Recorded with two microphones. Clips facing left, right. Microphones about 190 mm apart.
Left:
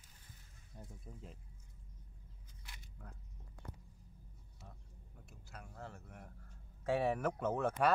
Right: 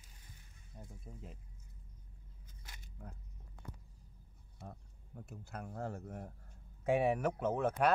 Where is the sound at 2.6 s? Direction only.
45° right (ahead or behind).